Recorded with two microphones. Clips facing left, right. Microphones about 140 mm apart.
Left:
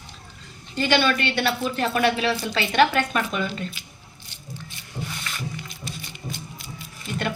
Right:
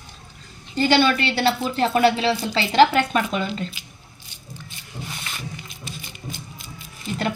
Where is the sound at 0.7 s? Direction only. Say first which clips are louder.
Right 3 dB; 35° right (ahead or behind).